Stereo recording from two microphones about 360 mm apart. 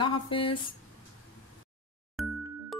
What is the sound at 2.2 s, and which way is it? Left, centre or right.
Music, centre.